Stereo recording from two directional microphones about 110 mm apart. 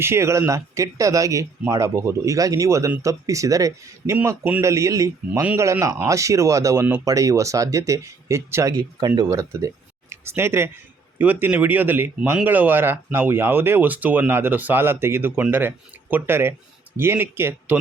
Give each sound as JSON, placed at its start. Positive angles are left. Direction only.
{"t": 0.0, "sound": "speech", "side_deg": -25}
{"t": 9.0, "sound": "speech", "side_deg": -35}